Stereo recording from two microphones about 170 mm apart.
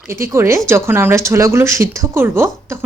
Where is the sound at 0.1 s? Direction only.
15° right (ahead or behind).